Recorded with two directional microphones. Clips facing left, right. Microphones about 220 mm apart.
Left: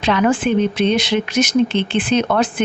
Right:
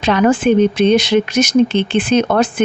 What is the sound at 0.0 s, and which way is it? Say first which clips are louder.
Speech: right 3 dB; 45° right (ahead or behind).